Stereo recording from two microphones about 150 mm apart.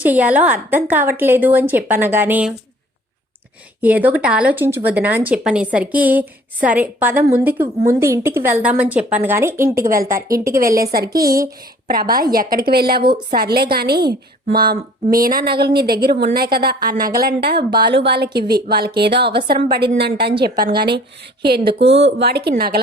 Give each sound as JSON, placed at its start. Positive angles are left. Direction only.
{"t": 0.0, "sound": "speech", "side_deg": -10}
{"t": 3.8, "sound": "a woman's voice", "side_deg": -10}
{"t": 10.8, "sound": "a woman's voice", "side_deg": -90}
{"t": 15.0, "sound": "a woman's voice", "side_deg": -70}
{"t": 21.8, "sound": "speech", "side_deg": -45}
{"t": 22.2, "sound": "a woman's voice", "side_deg": -90}